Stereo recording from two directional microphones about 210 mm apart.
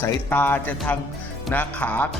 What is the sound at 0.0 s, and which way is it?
Speech, 10° left (ahead or behind).